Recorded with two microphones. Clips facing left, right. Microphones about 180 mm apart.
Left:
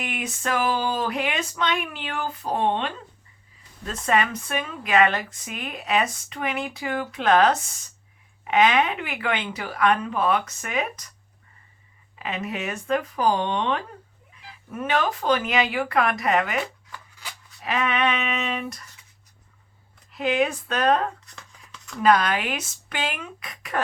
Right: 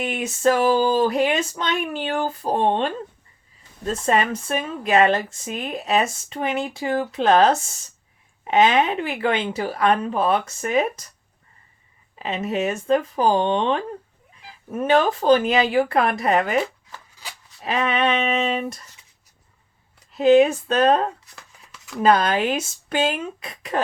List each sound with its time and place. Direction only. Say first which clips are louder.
0.0 s a sound: right 5 dB; 25° right (ahead or behind)
0.4 s speech: right 7 dB; 40° right (ahead or behind)
12.2 s speech: right 6 dB; 30° right (ahead or behind)
20.1 s speech: right 9 dB; 30° right (ahead or behind)
21.2 s a sound: even; 5° right (ahead or behind)
22.0 s speech: right 2 dB; 30° right (ahead or behind)